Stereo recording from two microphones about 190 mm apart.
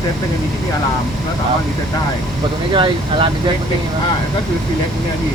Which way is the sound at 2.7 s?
25° right (ahead or behind).